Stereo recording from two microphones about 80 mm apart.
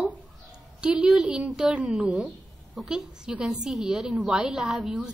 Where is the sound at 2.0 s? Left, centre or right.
Centre.